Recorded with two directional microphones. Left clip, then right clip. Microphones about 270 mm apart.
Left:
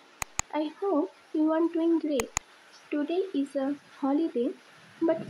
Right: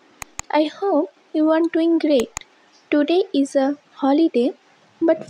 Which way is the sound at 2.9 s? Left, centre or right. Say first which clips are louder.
Right 11 dB; right.